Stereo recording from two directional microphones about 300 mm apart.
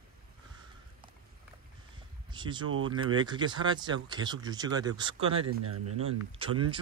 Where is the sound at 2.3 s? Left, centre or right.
Centre.